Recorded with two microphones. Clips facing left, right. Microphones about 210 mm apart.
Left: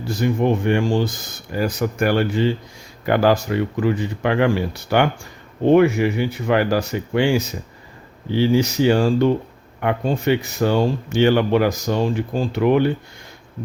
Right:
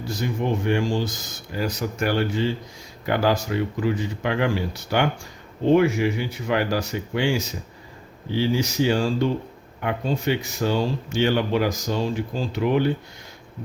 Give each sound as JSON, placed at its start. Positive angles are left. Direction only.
{"t": 0.2, "sound": "speech", "side_deg": 60}